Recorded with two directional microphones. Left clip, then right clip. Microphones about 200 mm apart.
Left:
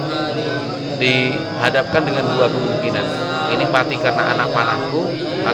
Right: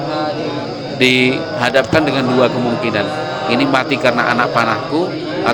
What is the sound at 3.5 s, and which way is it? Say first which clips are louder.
A man's voice: right 3 dB; 45° right (ahead or behind).